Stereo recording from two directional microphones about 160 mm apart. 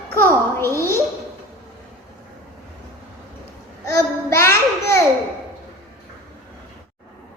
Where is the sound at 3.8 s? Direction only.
15° left (ahead or behind).